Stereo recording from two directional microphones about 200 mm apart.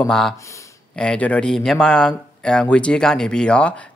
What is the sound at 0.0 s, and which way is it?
Speech, centre (ahead or behind).